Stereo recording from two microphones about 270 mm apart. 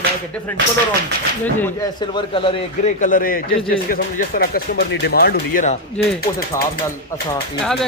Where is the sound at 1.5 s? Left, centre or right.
Centre; by 5.7 s left.